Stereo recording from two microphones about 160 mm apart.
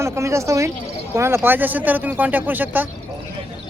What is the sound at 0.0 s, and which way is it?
Speech, 15° right (ahead or behind).